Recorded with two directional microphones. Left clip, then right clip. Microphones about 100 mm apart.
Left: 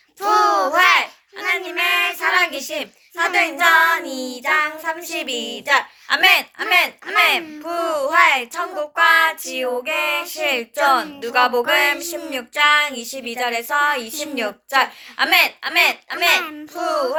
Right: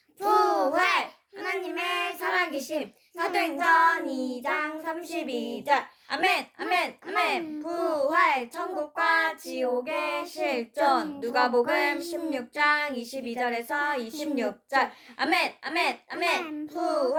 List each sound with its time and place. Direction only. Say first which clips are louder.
0.2 s child singing: left 7 dB; 5° left (ahead or behind)
2.2 s child singing: left 9 dB; 50° right (ahead or behind)
2.8 s a woman's voice: left 9 dB; 5° left (ahead or behind)
16.7 s a woman's voice: left 6 dB; 15° left (ahead or behind)